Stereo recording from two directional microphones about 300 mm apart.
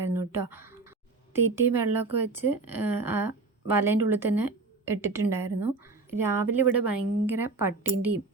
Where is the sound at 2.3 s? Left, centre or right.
Centre.